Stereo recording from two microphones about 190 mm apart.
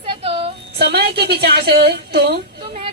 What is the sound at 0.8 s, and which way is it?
A woman's voice, 55° right (ahead or behind).